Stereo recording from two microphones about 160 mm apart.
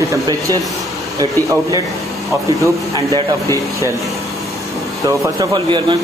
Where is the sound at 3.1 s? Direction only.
20° left (ahead or behind).